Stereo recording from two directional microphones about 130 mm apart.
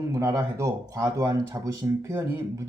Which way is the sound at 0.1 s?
25° right (ahead or behind).